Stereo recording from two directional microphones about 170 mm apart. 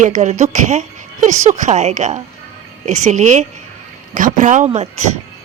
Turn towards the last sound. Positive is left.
turn(degrees=-40)  # may be behind; listen again after turning